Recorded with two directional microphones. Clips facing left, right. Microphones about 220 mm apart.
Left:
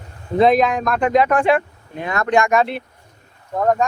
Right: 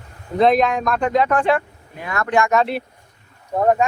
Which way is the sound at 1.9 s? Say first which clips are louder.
Left 2 dB; 20° left (ahead or behind).